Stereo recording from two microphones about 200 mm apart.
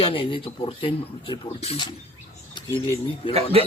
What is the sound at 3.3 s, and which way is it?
Speech, 30° right (ahead or behind).